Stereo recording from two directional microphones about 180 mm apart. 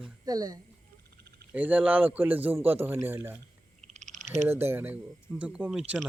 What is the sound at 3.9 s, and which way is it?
Frog, 40° right (ahead or behind).